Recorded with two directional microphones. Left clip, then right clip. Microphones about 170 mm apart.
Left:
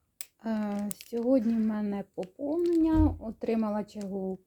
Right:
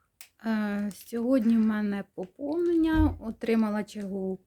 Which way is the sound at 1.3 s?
15° right (ahead or behind).